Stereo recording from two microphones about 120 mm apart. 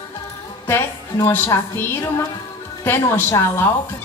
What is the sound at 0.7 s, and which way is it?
A woman's voice, 25° left (ahead or behind).